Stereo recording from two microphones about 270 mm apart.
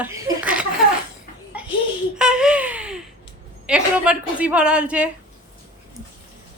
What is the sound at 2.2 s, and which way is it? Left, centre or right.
Baby laughter, centre.